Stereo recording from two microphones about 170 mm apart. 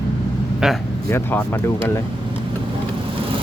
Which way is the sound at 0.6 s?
5° right (ahead or behind).